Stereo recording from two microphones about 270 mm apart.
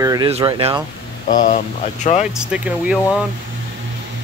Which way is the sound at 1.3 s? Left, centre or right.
Left.